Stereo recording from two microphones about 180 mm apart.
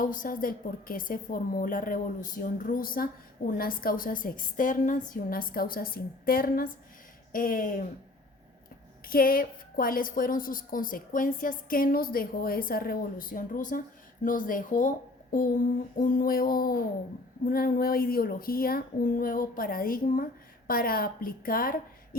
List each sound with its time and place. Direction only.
0.0 s a woman's voice: 50° left (ahead or behind)
9.0 s a woman's voice: 55° left (ahead or behind)